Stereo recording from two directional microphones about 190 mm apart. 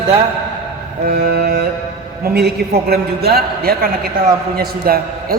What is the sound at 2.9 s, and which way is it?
A man's voice, 55° right (ahead or behind).